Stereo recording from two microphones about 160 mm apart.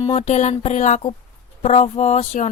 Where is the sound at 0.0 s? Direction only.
40° left (ahead or behind).